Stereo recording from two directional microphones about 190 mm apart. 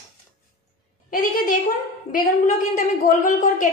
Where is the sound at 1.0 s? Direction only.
45° left (ahead or behind).